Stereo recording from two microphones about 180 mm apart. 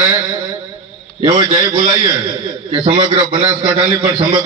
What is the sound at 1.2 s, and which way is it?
Speech, 25° right (ahead or behind).